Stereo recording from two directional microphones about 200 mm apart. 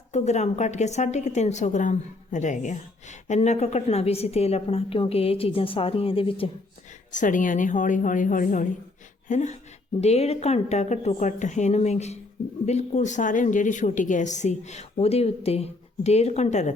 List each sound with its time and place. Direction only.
0.1 s a woman's voice: 35° left (ahead or behind)
7.1 s a woman's voice: 40° left (ahead or behind)